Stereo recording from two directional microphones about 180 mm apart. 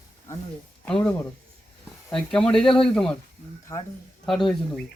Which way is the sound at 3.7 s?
20° left (ahead or behind).